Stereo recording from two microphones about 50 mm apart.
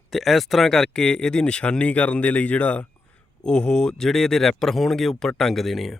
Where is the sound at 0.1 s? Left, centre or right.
Centre; by 2.8 s left.